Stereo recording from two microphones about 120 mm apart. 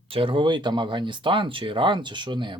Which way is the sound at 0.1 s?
45° right (ahead or behind).